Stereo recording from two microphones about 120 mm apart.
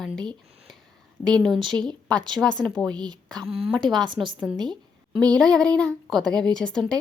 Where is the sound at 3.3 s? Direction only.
Centre (ahead or behind).